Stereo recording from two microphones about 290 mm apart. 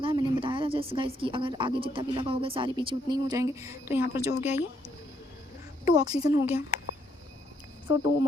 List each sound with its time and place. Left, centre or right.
0.0 s speech: centre
5.8 s speech: centre